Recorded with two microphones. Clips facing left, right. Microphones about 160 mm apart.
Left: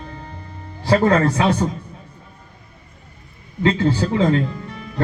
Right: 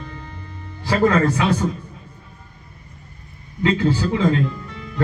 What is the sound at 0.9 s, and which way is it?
Speech, 35° left (ahead or behind).